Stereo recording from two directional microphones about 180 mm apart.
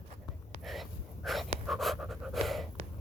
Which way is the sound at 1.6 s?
Centre (ahead or behind).